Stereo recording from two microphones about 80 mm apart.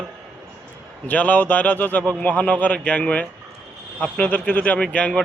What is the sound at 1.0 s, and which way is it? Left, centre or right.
A man's voice, centre.